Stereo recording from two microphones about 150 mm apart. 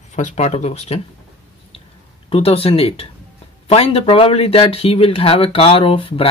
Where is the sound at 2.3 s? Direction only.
40° left (ahead or behind).